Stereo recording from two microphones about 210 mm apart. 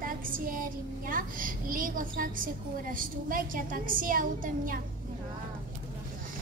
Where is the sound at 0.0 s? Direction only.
40° right (ahead or behind).